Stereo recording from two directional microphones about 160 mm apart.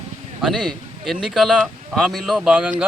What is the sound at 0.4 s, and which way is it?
A man's voice, centre (ahead or behind).